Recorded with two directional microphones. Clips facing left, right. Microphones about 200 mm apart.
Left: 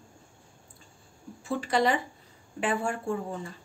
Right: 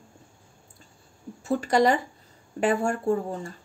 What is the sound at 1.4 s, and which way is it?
Speech, 45° right (ahead or behind).